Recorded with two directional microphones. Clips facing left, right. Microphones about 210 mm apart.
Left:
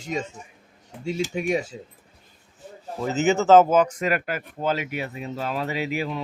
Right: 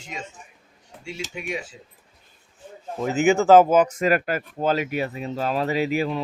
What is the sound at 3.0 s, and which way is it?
Speech, 10° right (ahead or behind).